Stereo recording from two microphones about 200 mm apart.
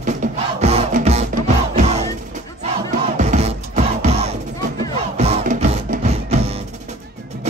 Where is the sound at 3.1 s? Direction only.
35° right (ahead or behind).